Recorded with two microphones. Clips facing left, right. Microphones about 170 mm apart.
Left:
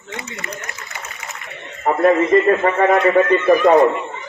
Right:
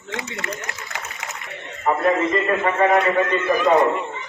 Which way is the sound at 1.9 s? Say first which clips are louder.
Left 5 dB; 45° left (ahead or behind).